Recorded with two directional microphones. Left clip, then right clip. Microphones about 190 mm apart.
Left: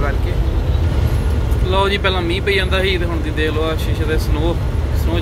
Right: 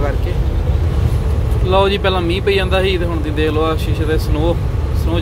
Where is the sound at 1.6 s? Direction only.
25° right (ahead or behind).